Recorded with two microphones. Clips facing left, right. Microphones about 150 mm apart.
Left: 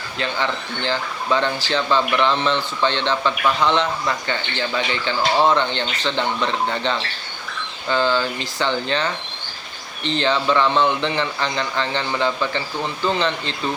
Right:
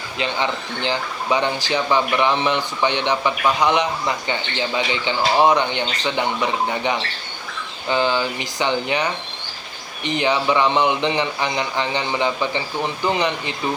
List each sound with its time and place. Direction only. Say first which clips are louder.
0.2 s speech: right 1 dB; 15° right (ahead or behind)